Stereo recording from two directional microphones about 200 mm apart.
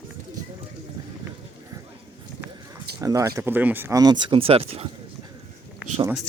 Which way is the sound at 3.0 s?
15° right (ahead or behind).